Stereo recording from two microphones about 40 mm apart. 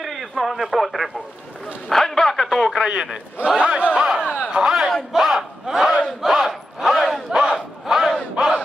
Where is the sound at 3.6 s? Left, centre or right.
Right.